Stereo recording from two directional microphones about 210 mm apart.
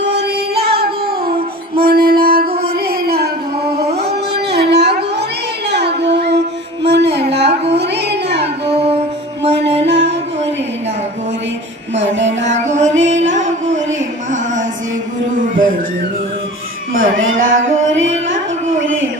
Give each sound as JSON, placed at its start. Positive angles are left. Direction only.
{"t": 0.0, "sound": "music", "side_deg": -55}
{"t": 3.9, "sound": "a sound", "side_deg": -50}
{"t": 5.6, "sound": "child singing", "side_deg": -55}
{"t": 6.8, "sound": "music", "side_deg": -55}
{"t": 8.7, "sound": "music", "side_deg": -30}
{"t": 9.8, "sound": "music", "side_deg": -55}
{"t": 11.9, "sound": "music", "side_deg": -60}
{"t": 12.5, "sound": "music", "side_deg": -35}
{"t": 15.4, "sound": "a sound", "side_deg": -40}
{"t": 16.9, "sound": "a sound", "side_deg": -70}